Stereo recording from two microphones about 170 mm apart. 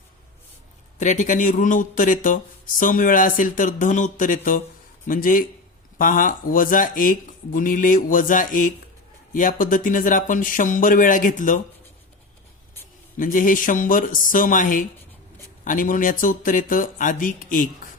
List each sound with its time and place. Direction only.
0.9 s speech: 45° left (ahead or behind)
13.1 s speech: 55° left (ahead or behind)